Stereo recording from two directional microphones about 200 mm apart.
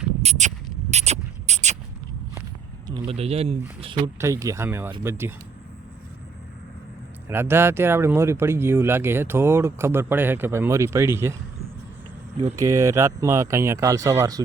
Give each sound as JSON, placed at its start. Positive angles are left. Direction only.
{"t": 0.2, "sound": "a sound", "side_deg": -35}
{"t": 2.8, "sound": "speech", "side_deg": -25}
{"t": 4.2, "sound": "speech", "side_deg": -15}
{"t": 7.3, "sound": "speech", "side_deg": -10}
{"t": 12.5, "sound": "speech", "side_deg": -15}